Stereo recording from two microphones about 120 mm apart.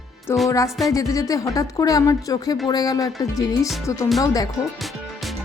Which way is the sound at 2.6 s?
30° left (ahead or behind).